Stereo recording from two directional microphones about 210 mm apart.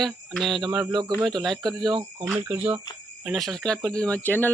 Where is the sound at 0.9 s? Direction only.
20° right (ahead or behind).